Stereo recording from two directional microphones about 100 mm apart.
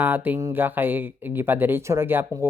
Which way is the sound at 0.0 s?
20° right (ahead or behind).